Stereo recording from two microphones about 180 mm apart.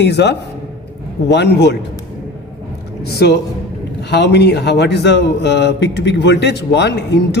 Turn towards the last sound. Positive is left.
turn(degrees=75)  # may be behind; listen again after turning